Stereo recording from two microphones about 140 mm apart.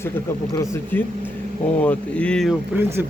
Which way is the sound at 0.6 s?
20° left (ahead or behind).